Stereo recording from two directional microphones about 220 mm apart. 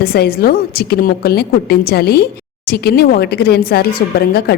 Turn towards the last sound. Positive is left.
turn(degrees=45)  # may be behind; listen again after turning